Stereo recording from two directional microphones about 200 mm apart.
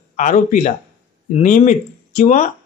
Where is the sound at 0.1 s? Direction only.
35° left (ahead or behind).